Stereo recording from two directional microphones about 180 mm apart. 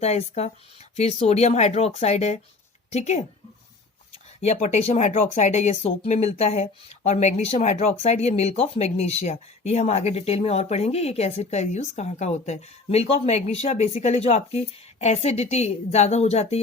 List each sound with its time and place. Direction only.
0.0 s speech: 35° left (ahead or behind)
4.4 s speech: 40° left (ahead or behind)